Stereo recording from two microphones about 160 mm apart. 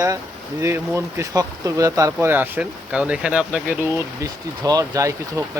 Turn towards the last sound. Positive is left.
turn(degrees=-20)  # may be behind; listen again after turning